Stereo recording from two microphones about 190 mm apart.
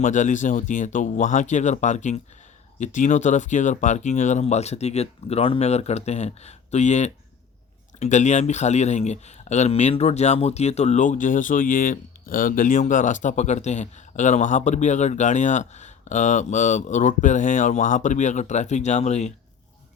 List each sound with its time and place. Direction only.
0.0 s speech: 40° left (ahead or behind)